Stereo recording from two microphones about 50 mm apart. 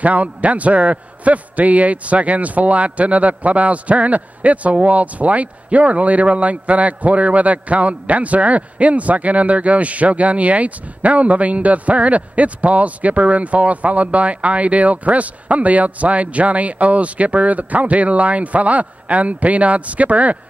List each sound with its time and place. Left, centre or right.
0.0 s a man's voice: right